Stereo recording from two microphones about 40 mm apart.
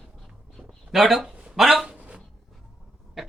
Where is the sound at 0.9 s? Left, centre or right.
Centre.